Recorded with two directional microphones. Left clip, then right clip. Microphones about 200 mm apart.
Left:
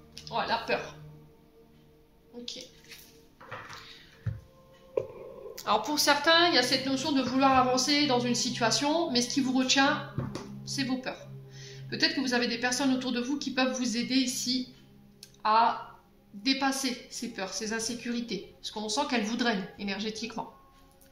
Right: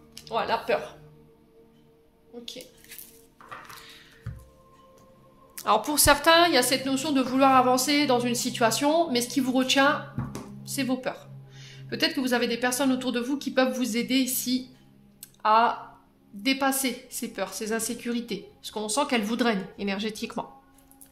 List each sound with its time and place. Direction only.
0.3 s a woman's voice: 55° right (ahead or behind)
3.4 s music: 45° right (ahead or behind)
5.5 s a woman's voice: 45° right (ahead or behind)